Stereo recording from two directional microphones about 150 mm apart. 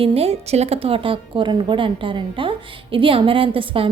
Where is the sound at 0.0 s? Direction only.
40° right (ahead or behind).